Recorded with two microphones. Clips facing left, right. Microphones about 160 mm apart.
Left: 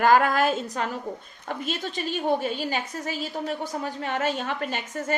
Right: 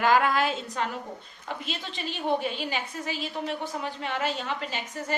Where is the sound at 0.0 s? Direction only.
45° left (ahead or behind).